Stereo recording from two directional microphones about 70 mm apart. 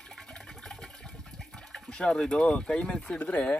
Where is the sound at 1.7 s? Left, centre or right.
Centre.